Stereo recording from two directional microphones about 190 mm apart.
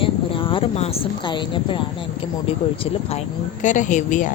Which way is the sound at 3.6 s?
40° left (ahead or behind).